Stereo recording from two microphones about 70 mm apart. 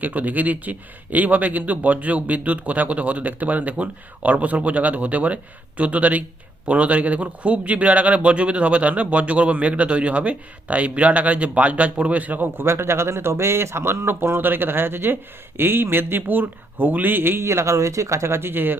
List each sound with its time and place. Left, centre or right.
0.0 s a man's voice: right